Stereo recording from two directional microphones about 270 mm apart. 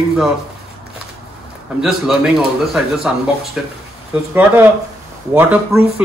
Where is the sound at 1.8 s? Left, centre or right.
Centre.